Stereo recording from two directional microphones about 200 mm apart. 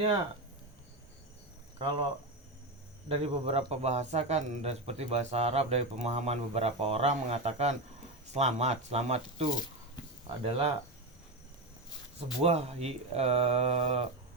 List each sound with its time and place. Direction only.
1.8 s speech: 25° right (ahead or behind)
3.1 s speech: 30° right (ahead or behind)
12.4 s speech: 30° right (ahead or behind)